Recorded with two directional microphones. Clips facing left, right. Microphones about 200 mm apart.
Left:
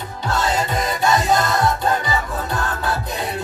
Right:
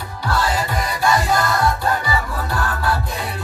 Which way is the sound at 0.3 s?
20° left (ahead or behind).